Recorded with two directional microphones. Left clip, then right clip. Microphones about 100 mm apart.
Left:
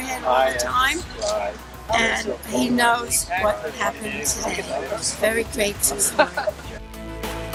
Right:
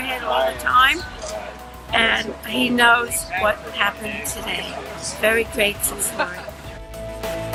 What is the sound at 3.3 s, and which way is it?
Speech, 35° left (ahead or behind).